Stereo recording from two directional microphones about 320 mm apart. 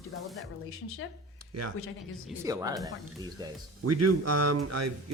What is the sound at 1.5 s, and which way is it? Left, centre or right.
Speech, right.